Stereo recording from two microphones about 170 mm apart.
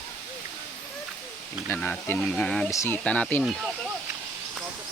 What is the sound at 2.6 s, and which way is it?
Speech, 15° left (ahead or behind).